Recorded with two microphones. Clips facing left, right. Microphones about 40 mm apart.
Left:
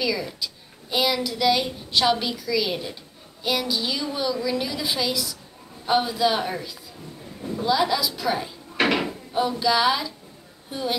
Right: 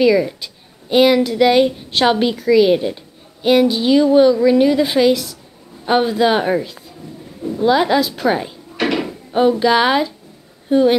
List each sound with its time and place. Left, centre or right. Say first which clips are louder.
0.0 s a woman's voice: right 12 dB; right
8.7 s a sound: right 3 dB; centre
9.3 s a woman's voice: right 9 dB; right